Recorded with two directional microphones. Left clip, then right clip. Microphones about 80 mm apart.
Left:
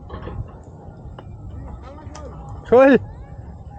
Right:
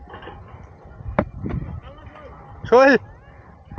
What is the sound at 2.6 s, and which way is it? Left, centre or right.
Speech, right.